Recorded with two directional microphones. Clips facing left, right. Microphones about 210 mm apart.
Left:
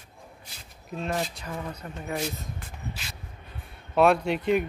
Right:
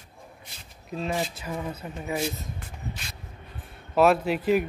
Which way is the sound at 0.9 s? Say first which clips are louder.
Right 1 dB; centre (ahead or behind).